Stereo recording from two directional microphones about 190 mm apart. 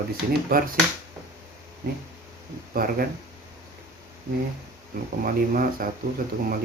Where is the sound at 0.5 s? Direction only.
50° right (ahead or behind).